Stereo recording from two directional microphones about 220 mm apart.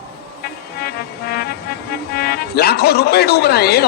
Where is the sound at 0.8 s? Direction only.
45° left (ahead or behind).